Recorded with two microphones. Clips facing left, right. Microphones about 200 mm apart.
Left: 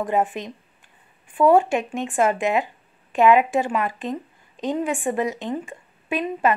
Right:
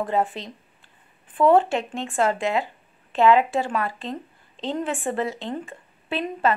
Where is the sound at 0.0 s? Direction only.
15° left (ahead or behind).